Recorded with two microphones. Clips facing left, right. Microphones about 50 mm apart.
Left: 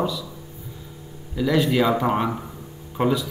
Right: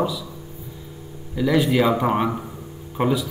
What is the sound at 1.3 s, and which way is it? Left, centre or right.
A man's voice, centre.